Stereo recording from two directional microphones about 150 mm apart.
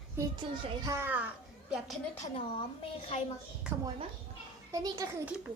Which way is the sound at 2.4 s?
35° left (ahead or behind).